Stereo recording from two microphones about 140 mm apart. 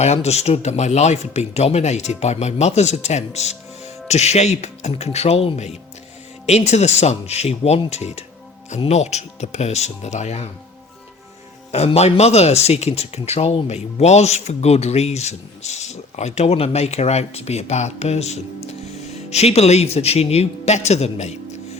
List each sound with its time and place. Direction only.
0.0 s speech: 50° left (ahead or behind)
11.7 s speech: 50° left (ahead or behind)